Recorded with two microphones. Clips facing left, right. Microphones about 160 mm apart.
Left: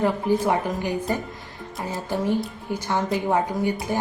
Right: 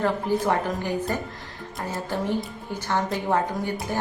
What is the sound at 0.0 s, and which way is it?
Speech, 10° left (ahead or behind).